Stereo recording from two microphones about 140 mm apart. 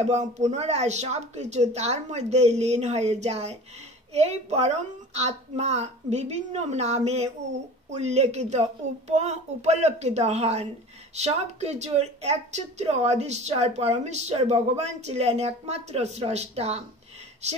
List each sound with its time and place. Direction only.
0.1 s a woman's voice: 55° right (ahead or behind)